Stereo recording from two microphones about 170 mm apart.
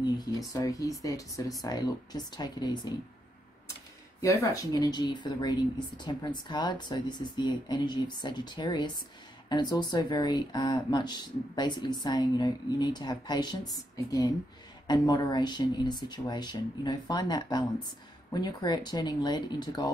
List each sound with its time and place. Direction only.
0.2 s speech: 20° left (ahead or behind)
4.2 s speech: 20° left (ahead or behind)